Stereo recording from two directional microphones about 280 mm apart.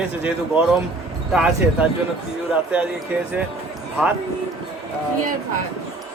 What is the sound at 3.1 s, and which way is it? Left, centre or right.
Speech, centre.